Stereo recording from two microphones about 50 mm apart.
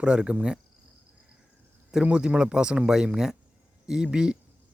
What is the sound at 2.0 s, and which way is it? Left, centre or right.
A man's voice, right.